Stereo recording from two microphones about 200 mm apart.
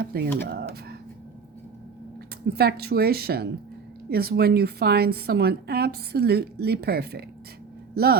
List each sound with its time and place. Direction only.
0.0 s a woman's voice: 50° right (ahead or behind)
2.5 s a woman's voice: 50° right (ahead or behind)